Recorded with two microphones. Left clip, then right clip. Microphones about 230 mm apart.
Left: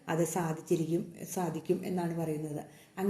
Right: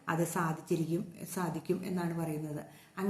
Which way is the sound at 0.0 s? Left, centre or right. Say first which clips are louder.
Left 1 dB; centre.